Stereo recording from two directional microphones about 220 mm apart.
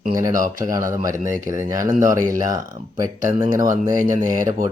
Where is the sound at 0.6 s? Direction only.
15° right (ahead or behind).